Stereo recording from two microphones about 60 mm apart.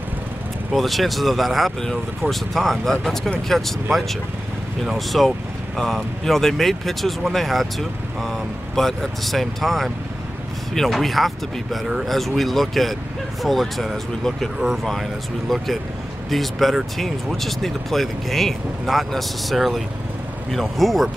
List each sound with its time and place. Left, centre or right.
0.7 s speech: centre